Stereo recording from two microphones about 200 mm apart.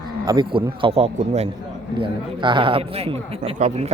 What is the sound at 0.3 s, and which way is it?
Speech, 25° right (ahead or behind).